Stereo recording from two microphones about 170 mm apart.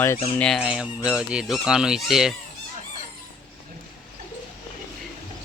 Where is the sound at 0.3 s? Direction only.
5° left (ahead or behind).